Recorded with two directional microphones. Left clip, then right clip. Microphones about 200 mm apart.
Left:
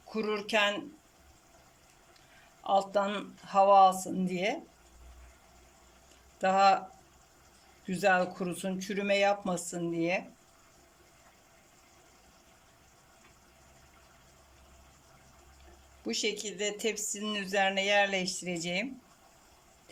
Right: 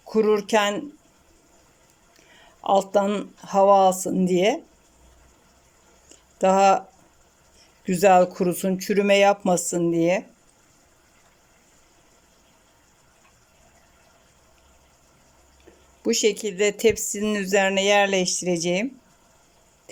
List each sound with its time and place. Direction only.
0.1 s speech: 35° right (ahead or behind)
2.6 s speech: 35° right (ahead or behind)
6.4 s speech: 35° right (ahead or behind)
7.9 s speech: 35° right (ahead or behind)
16.0 s speech: 40° right (ahead or behind)